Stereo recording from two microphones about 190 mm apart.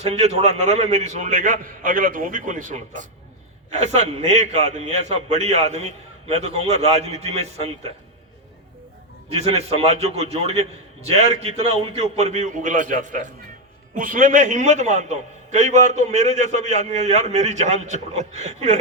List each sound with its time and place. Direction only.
0.0 s a man's voice: 35° right (ahead or behind)
9.3 s a man's voice: 35° right (ahead or behind)